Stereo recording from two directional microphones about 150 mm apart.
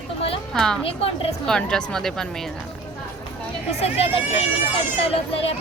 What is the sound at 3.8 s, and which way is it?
A woman's voice, 45° left (ahead or behind).